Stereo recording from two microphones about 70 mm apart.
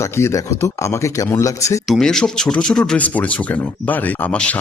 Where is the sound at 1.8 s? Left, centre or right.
Centre.